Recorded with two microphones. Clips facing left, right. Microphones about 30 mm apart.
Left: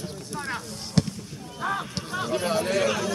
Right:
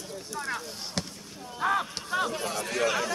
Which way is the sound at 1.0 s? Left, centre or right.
Centre.